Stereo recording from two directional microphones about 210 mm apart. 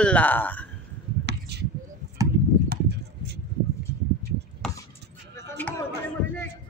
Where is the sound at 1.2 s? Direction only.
50° right (ahead or behind).